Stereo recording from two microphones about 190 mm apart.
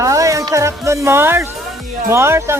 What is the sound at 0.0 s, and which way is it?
Music, 15° right (ahead or behind).